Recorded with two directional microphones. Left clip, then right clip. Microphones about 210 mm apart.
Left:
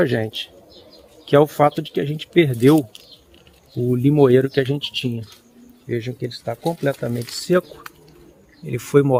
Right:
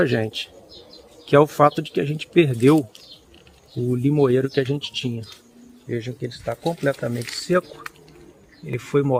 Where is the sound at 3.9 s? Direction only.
35° left (ahead or behind).